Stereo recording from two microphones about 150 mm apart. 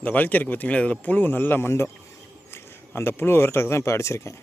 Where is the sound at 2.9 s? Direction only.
15° left (ahead or behind).